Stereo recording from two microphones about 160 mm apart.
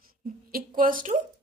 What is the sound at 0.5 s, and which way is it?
Speech, 60° right (ahead or behind).